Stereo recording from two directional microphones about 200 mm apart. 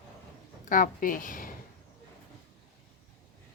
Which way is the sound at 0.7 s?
45° left (ahead or behind).